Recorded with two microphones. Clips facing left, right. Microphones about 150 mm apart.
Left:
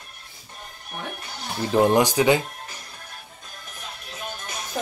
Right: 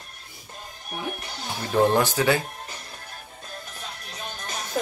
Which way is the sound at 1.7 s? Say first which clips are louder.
Left 2 dB; 15° left (ahead or behind).